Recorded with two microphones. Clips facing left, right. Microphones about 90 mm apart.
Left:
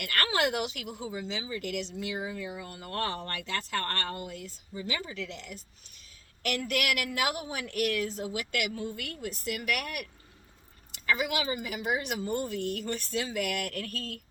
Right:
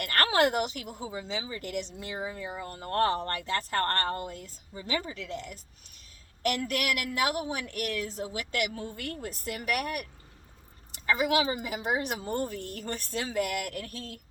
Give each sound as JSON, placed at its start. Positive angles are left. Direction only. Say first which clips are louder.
{"t": 0.0, "sound": "speech", "louder": "right 4 dB", "side_deg": -40}
{"t": 11.2, "sound": "speech", "louder": "right 4 dB", "side_deg": -40}